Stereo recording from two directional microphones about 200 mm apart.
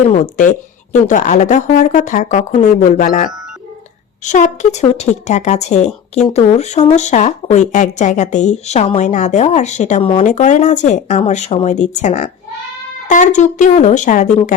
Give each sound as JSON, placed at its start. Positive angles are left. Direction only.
{"t": 0.1, "sound": "speech", "side_deg": 40}